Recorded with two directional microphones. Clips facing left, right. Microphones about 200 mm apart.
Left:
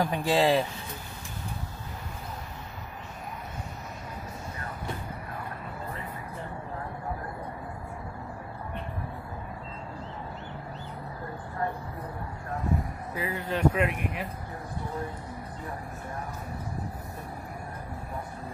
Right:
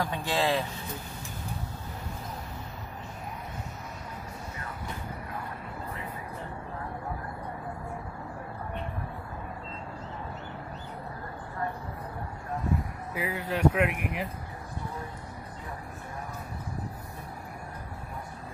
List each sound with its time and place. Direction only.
0.0 s speech: 30° left (ahead or behind)
13.1 s speech: 15° right (ahead or behind)